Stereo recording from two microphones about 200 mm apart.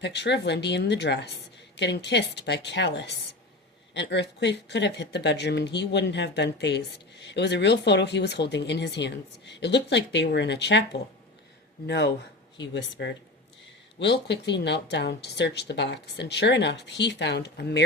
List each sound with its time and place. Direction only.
0.0 s speech: 60° left (ahead or behind)
11.9 s speech: 60° left (ahead or behind)